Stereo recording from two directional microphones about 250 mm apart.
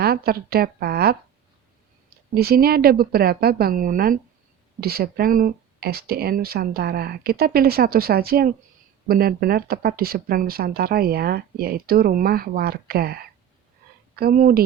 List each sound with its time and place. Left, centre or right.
0.0 s speech: right
2.3 s speech: right